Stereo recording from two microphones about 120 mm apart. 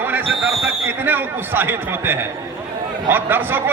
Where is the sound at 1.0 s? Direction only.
15° right (ahead or behind).